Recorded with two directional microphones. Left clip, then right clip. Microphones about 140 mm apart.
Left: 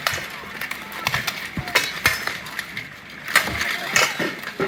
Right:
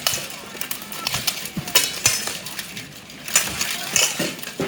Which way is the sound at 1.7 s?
20° right (ahead or behind).